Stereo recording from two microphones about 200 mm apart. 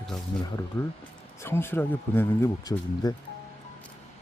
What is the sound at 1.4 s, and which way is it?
Speech, 10° left (ahead or behind).